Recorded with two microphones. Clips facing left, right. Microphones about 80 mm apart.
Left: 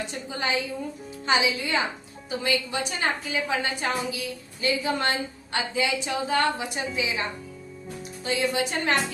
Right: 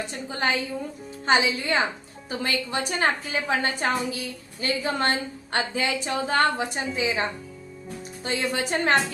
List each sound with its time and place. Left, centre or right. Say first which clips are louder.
0.1 s a woman's voice: right 4 dB; right